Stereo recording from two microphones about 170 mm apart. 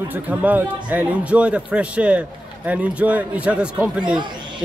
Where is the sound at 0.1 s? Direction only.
10° right (ahead or behind).